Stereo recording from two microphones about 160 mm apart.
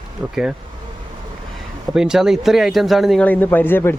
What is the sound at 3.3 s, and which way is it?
Speech, 10° left (ahead or behind).